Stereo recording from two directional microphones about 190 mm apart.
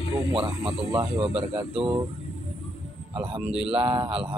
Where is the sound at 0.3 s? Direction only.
30° right (ahead or behind).